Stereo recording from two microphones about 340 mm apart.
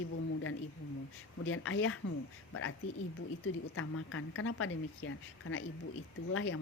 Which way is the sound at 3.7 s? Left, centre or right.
Left.